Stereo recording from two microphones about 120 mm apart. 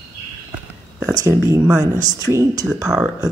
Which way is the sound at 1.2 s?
25° right (ahead or behind).